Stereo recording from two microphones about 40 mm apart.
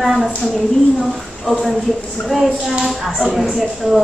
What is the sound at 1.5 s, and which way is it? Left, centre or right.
A woman's voice, centre.